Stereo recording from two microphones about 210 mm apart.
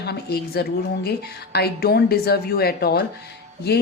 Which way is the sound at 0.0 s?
50° left (ahead or behind).